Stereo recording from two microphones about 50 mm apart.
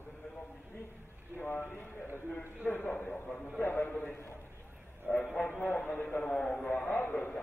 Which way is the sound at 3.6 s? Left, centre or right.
Left.